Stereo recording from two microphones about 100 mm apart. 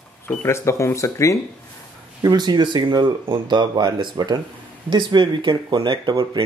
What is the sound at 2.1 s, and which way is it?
Speech, 45° right (ahead or behind).